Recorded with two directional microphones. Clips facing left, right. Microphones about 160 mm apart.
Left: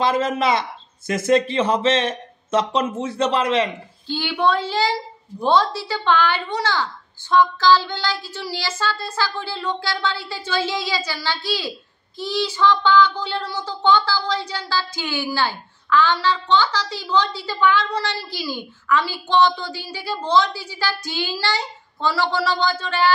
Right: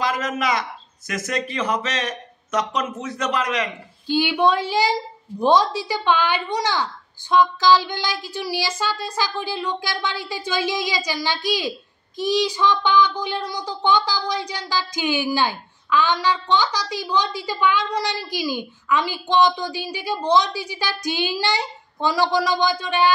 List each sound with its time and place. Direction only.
0.0 s a man's voice: 30° left (ahead or behind)
4.1 s speech: 15° right (ahead or behind)